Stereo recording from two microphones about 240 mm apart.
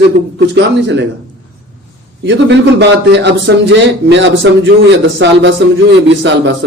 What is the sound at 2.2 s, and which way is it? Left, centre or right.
A man's voice, right.